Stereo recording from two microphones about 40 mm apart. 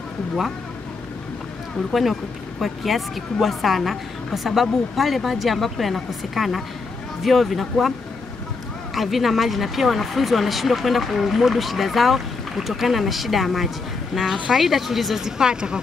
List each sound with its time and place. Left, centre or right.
1.9 s speech: centre
8.9 s speech: centre
15.2 s speech: centre